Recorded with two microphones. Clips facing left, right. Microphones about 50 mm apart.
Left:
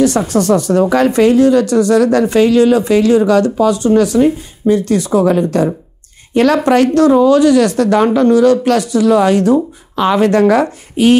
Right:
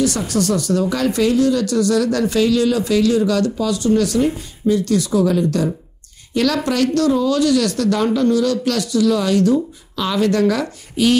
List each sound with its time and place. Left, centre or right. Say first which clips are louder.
0.0 s speech: left 6 dB; left